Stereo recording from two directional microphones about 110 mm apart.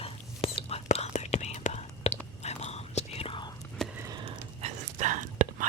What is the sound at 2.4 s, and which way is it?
Whispering, 80° left.